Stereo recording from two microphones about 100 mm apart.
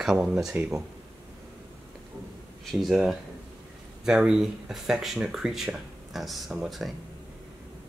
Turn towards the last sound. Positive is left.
turn(degrees=0)  # may be behind; listen again after turning